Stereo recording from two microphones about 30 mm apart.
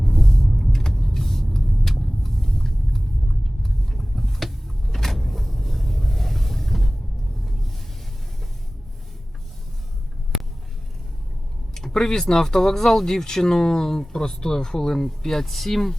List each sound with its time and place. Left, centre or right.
0.0 s vehicle: centre
5.1 s vehicle: centre
11.9 s speech: centre